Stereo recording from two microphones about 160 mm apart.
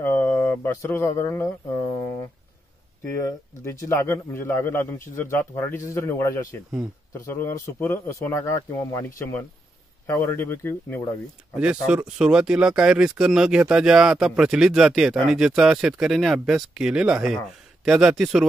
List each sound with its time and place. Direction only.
0.0 s speech: 15° left (ahead or behind)
2.0 s a sound: 20° left (ahead or behind)
3.6 s a man's voice: 15° left (ahead or behind)
11.5 s speech: 5° right (ahead or behind)